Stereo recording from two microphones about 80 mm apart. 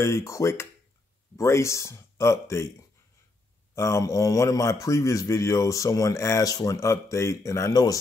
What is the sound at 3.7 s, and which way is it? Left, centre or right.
A man's voice, left.